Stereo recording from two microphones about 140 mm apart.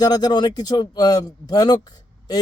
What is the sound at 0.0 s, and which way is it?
Speech, 30° left (ahead or behind).